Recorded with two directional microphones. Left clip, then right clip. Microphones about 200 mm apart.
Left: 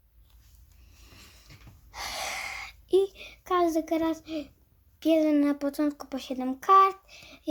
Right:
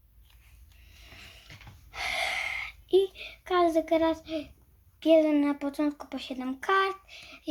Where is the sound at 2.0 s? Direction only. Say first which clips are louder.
Right 4 dB; 55° left (ahead or behind).